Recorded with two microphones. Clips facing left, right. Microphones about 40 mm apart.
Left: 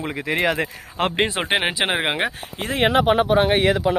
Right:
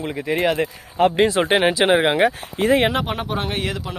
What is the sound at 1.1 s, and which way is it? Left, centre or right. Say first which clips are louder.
Speech: right 4 dB; left.